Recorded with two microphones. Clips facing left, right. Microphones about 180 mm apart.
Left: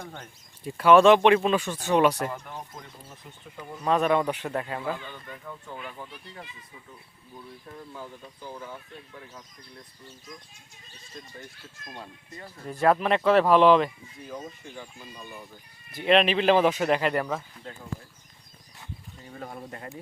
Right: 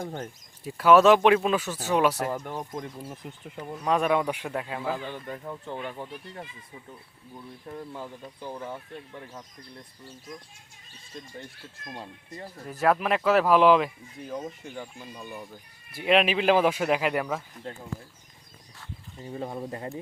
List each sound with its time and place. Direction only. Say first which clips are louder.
0.6 s speech: left 1 dB; centre (ahead or behind)
2.3 s speech: right 5 dB; 40° right (ahead or behind)
3.8 s speech: left 1 dB; 10° right (ahead or behind)
4.9 s speech: right 6 dB; 35° right (ahead or behind)
12.8 s speech: left 2 dB; 5° right (ahead or behind)
15.9 s speech: left 1 dB; 5° right (ahead or behind)
19.2 s speech: right 6 dB; 25° right (ahead or behind)